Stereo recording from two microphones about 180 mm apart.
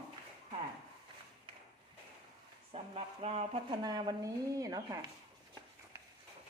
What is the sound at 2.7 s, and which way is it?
Speech, 35° right (ahead or behind).